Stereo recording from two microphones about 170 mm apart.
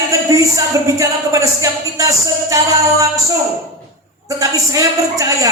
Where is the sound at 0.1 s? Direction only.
20° right (ahead or behind).